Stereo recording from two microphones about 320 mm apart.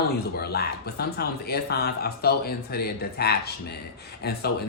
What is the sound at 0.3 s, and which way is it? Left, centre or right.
Speech, left.